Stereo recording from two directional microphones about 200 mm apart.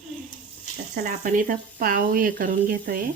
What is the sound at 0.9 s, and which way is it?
Speech, 45° right (ahead or behind).